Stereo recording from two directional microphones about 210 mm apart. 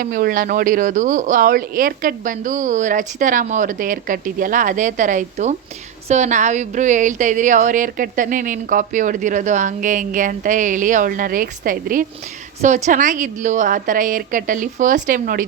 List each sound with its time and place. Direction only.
0.0 s speech: 40° right (ahead or behind)